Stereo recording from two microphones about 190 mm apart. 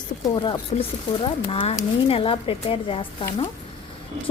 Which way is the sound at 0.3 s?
25° left (ahead or behind).